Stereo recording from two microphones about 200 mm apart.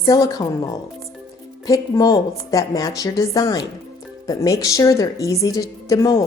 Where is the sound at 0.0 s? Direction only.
20° left (ahead or behind).